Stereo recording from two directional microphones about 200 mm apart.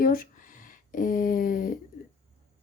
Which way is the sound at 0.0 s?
45° left (ahead or behind).